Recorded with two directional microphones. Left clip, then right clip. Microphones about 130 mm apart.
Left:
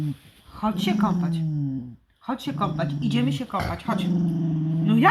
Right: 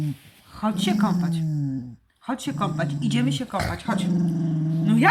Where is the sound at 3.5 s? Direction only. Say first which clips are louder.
Even; 10° right (ahead or behind).